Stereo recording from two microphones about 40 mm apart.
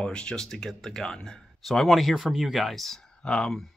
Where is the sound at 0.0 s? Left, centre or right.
Left.